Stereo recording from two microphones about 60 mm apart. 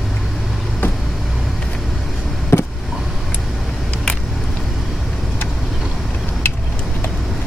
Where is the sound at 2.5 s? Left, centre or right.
Left.